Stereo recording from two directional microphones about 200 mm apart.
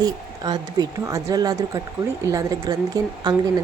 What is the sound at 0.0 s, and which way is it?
A woman's voice, 20° right (ahead or behind).